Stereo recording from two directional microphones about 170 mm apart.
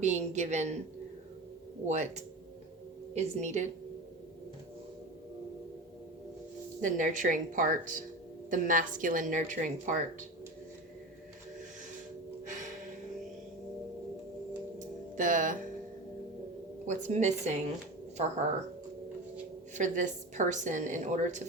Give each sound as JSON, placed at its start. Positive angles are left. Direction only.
{"t": 0.0, "sound": "a woman's voice", "side_deg": -40}
{"t": 1.9, "sound": "a woman's voice", "side_deg": -40}
{"t": 6.8, "sound": "a woman's voice", "side_deg": -50}
{"t": 14.8, "sound": "music", "side_deg": -50}
{"t": 16.8, "sound": "a woman's voice", "side_deg": -45}
{"t": 19.7, "sound": "a woman's voice", "side_deg": -45}